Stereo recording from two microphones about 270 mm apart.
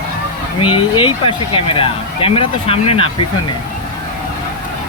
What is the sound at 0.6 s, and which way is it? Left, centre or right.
Speech, centre.